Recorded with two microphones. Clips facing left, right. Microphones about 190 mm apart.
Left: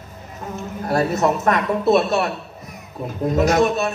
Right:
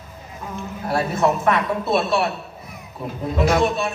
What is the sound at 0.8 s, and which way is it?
Speech, 40° left (ahead or behind).